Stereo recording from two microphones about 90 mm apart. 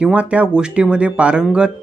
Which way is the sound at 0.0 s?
10° right (ahead or behind).